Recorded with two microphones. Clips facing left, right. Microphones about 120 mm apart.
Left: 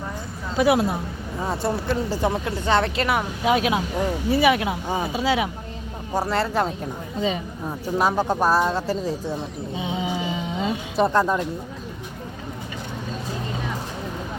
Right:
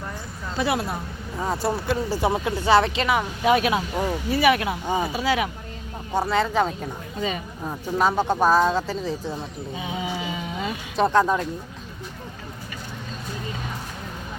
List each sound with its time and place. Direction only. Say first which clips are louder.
0.5 s speech: left 6 dB; 15° left (ahead or behind)
1.4 s speech: even; centre (ahead or behind)
3.4 s speech: right 1 dB; 15° left (ahead or behind)
4.9 s speech: right 4 dB; centre (ahead or behind)
5.1 s speech: left 1 dB; 25° left (ahead or behind)
6.1 s speech: right 1 dB; 5° left (ahead or behind)
9.7 s music: left 3 dB; 25° left (ahead or behind)
10.9 s speech: right 1 dB; 5° left (ahead or behind)